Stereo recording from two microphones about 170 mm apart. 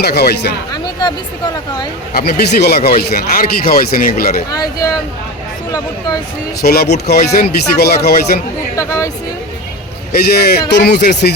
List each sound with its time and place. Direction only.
0.0 s speech: 70° left (ahead or behind)
0.7 s music: 25° left (ahead or behind)
2.1 s speech: 65° left (ahead or behind)
4.5 s speech: 20° left (ahead or behind)
6.6 s speech: 65° left (ahead or behind)
8.7 s speech: 20° left (ahead or behind)
10.1 s speech: 65° left (ahead or behind)